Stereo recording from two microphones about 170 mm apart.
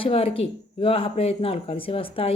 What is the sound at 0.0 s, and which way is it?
Speech, 35° left (ahead or behind).